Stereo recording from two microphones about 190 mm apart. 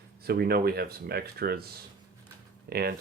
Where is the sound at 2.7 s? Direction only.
55° right (ahead or behind).